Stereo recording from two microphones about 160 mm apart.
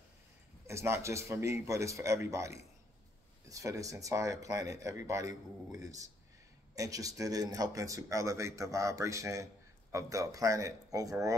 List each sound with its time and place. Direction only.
0.7 s a man's voice: 15° right (ahead or behind)